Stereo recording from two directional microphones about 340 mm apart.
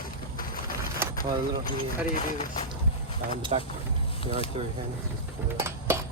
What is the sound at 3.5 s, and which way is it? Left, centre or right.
Speech, centre.